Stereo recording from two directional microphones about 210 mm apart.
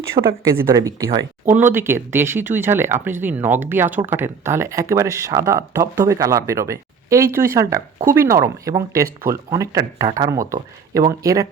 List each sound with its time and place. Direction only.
0.2 s speech: 30° right (ahead or behind)
0.7 s speech: 15° right (ahead or behind)